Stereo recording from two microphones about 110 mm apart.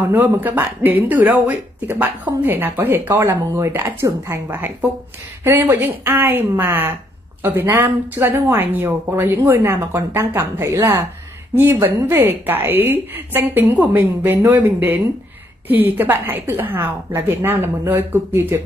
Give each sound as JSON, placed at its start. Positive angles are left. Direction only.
{"t": 0.1, "sound": "a woman's voice", "side_deg": -15}